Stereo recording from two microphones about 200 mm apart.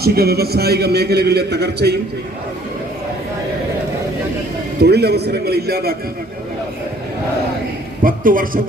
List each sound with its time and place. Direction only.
0.0 s a man's voice: 50° right (ahead or behind)
4.8 s a man's voice: 55° right (ahead or behind)
8.0 s a man's voice: 45° right (ahead or behind)